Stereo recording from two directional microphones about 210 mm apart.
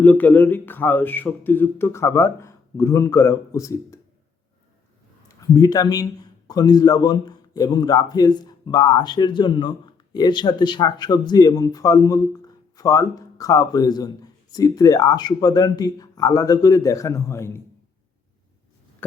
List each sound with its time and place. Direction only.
0.0 s a man's voice: 10° left (ahead or behind)
5.4 s a man's voice: 20° left (ahead or behind)